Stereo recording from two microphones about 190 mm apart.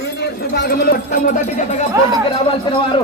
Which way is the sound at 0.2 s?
60° left (ahead or behind).